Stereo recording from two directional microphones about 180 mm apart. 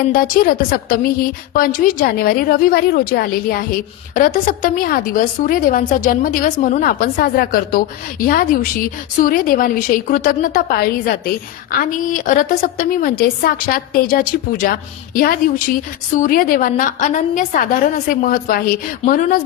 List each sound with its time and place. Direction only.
0.0 s a woman's voice: 55° left (ahead or behind)